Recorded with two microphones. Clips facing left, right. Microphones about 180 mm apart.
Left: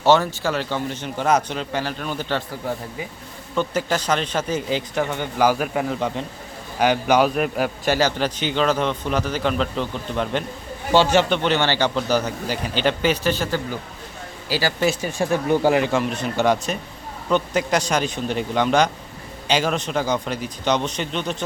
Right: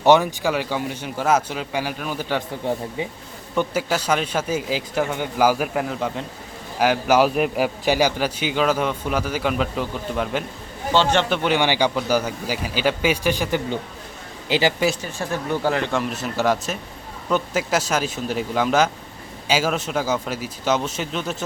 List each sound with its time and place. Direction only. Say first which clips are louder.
0.0 s a man's voice: right 1 dB; 15° right (ahead or behind)
2.6 s speech: right 4 dB; 30° right (ahead or behind)
3.5 s a man's voice: even; 10° right (ahead or behind)
10.9 s speech: left 3 dB; 10° left (ahead or behind)
11.3 s a man's voice: even; 10° right (ahead or behind)
15.0 s speech: left 5 dB; 15° left (ahead or behind)
15.9 s speech: left 2 dB; centre (ahead or behind)